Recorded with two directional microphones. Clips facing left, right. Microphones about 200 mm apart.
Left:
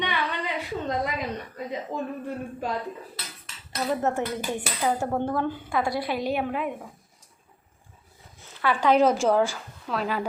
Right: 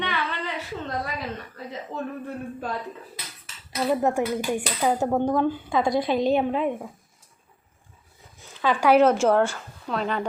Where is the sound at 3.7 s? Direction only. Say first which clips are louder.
Right 3 dB; 10° right (ahead or behind).